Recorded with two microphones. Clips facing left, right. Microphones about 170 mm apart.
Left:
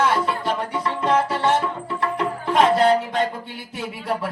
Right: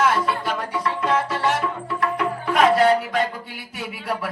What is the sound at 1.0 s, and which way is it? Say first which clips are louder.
Music: left 3 dB; 30° left (ahead or behind).